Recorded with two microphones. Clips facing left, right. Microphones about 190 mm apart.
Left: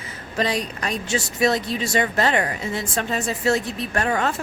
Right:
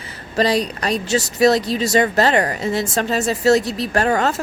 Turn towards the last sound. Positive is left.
turn(degrees=-40)  # may be behind; listen again after turning